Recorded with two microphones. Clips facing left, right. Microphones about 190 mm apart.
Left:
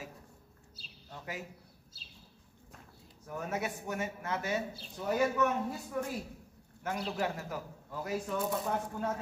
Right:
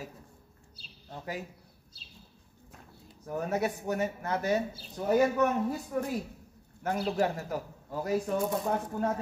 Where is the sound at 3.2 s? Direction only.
40° right (ahead or behind).